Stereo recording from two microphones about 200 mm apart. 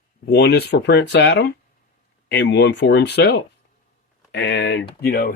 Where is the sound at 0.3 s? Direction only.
55° left (ahead or behind).